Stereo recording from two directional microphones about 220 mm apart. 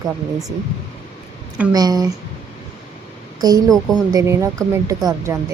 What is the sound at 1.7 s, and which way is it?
Speech, 15° right (ahead or behind).